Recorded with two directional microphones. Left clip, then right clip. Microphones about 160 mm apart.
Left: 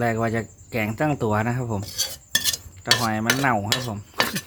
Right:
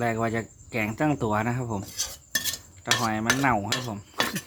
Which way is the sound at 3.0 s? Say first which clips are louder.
Left 2 dB; 5° left (ahead or behind).